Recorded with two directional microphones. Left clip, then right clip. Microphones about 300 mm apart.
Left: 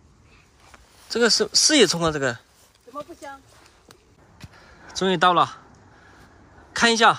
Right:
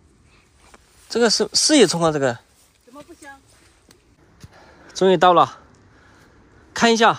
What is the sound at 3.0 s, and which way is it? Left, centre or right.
Speech, left.